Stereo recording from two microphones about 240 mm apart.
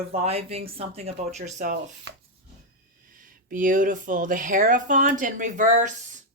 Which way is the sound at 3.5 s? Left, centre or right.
Right.